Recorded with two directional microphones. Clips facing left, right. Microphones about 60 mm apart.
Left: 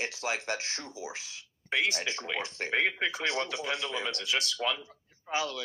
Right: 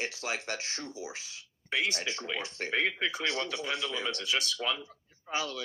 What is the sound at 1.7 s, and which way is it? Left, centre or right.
A man's voice, left.